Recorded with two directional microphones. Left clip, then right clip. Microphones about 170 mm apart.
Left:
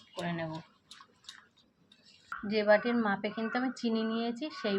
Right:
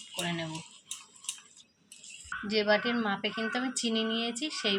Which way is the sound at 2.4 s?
5° right (ahead or behind).